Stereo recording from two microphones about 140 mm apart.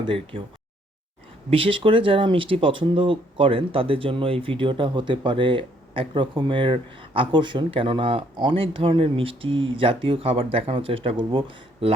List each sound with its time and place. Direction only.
0.0 s speech: 40° right (ahead or behind)
1.5 s speech: 40° right (ahead or behind)